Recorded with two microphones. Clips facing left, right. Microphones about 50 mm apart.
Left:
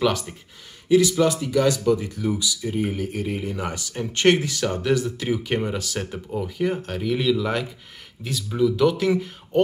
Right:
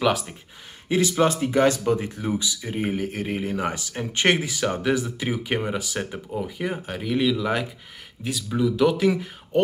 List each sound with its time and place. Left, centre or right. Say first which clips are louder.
0.0 s speech: even; centre
0.8 s speech: left 3 dB; right; by 9.6 s centre